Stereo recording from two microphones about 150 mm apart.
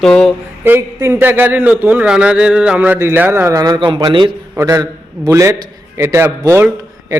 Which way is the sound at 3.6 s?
30° right (ahead or behind).